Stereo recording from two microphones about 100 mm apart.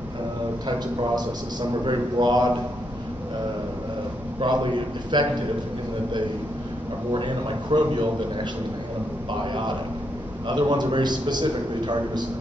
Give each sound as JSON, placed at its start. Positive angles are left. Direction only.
{"t": 0.7, "sound": "a man's voice", "side_deg": -45}
{"t": 4.4, "sound": "a man's voice", "side_deg": -50}
{"t": 7.1, "sound": "a man's voice", "side_deg": -50}
{"t": 9.4, "sound": "a man's voice", "side_deg": -55}